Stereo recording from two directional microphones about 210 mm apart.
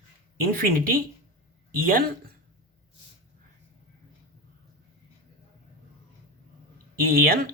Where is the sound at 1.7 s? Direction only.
45° right (ahead or behind).